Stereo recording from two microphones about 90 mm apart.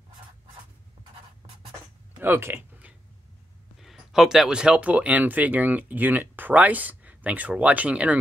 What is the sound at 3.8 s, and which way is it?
Speech, 5° right (ahead or behind).